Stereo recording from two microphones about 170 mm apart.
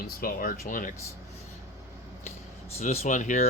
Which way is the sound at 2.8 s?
40° left (ahead or behind).